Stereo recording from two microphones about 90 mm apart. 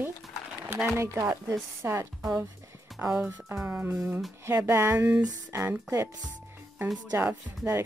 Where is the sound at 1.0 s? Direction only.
30° right (ahead or behind).